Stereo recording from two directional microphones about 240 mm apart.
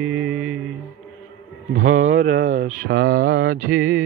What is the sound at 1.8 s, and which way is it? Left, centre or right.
Mantra, right.